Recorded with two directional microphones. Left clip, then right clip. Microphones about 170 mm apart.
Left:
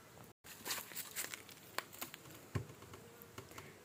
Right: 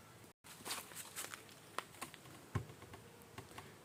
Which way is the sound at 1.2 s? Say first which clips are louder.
Left 3 dB; 40° left (ahead or behind).